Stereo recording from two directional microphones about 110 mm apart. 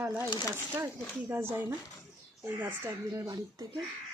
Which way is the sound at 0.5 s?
25° right (ahead or behind).